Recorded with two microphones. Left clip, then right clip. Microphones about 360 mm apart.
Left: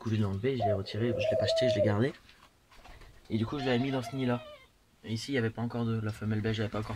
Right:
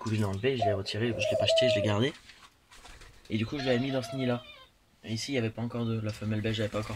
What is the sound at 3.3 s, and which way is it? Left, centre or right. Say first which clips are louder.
Speech: right 2 dB; centre.